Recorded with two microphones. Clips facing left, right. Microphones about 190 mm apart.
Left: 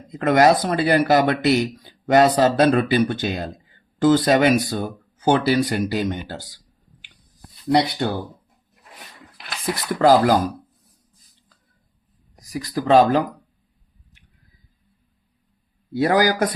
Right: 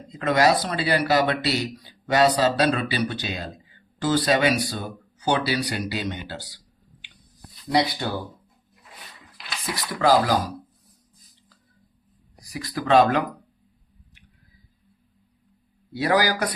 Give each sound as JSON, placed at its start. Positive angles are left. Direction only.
{"t": 0.1, "sound": "speech", "side_deg": 50}
{"t": 7.7, "sound": "speech", "side_deg": 60}
{"t": 9.7, "sound": "speech", "side_deg": 50}
{"t": 12.4, "sound": "speech", "side_deg": 40}
{"t": 15.9, "sound": "speech", "side_deg": 50}